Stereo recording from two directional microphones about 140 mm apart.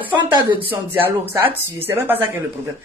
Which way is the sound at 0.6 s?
15° right (ahead or behind).